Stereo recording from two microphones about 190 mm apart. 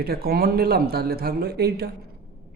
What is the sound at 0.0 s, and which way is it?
Speech, 55° right (ahead or behind).